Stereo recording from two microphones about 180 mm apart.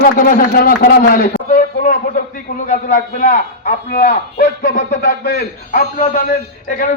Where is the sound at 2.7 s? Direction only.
45° left (ahead or behind).